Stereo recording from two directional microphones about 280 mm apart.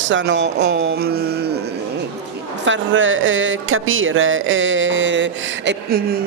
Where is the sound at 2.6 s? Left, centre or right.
Right.